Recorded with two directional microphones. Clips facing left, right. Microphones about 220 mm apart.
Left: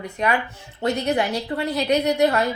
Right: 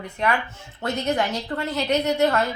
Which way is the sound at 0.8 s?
15° left (ahead or behind).